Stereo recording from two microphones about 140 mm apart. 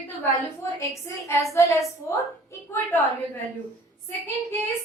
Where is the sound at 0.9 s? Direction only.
20° left (ahead or behind).